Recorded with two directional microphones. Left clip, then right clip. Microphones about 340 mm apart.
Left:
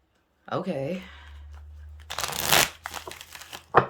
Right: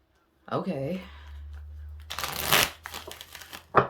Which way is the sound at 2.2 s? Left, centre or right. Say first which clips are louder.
Left 2 dB; centre.